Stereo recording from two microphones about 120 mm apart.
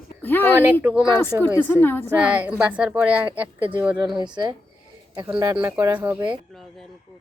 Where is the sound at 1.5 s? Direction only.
15° left (ahead or behind).